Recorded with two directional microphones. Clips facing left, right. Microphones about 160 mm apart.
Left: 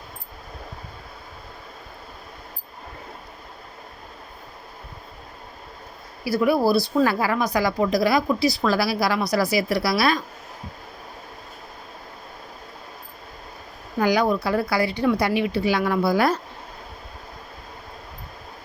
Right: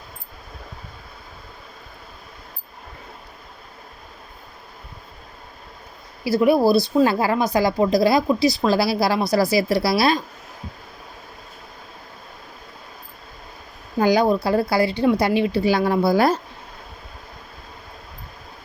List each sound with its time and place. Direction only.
6.2 s speech: 25° right (ahead or behind)
14.0 s speech: 30° right (ahead or behind)